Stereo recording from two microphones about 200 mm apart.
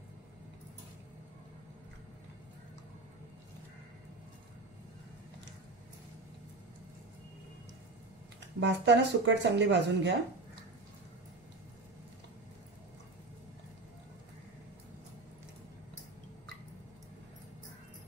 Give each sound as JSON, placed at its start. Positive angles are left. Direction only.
{"t": 8.5, "sound": "speech", "side_deg": -65}